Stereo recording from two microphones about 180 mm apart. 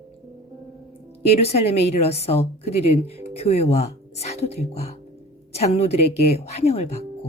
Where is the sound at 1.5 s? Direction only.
35° left (ahead or behind).